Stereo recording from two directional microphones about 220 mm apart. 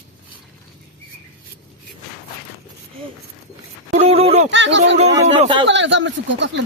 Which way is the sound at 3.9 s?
30° right (ahead or behind).